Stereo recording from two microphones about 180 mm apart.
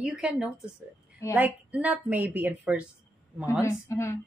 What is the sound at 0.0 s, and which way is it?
A woman's voice, 5° right (ahead or behind).